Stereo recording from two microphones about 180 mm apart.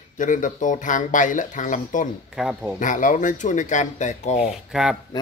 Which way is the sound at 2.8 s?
45° left (ahead or behind).